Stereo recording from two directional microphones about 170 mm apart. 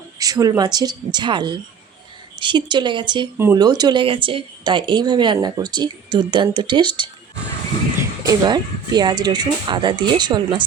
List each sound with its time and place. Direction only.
0.2 s speech: 20° right (ahead or behind)
8.3 s speech: 25° right (ahead or behind)